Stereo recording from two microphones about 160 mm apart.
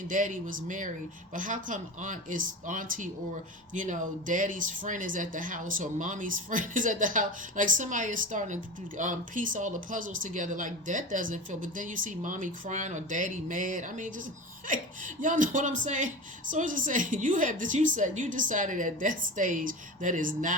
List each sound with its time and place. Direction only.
0.1 s a woman's voice: 55° right (ahead or behind)